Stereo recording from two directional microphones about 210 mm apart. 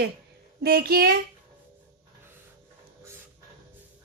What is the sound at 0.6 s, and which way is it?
Speech, 45° right (ahead or behind).